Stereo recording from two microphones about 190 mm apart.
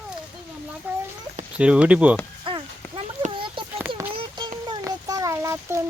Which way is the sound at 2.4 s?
30° right (ahead or behind).